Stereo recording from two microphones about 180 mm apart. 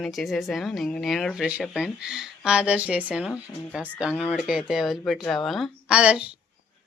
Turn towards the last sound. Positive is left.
turn(degrees=-5)  # may be behind; listen again after turning